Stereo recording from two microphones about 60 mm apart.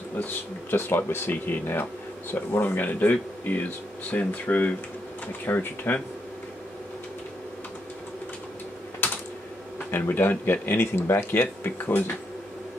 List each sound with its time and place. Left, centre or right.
0.2 s speech: left
2.3 s speech: left
5.5 s speech: left
9.8 s speech: left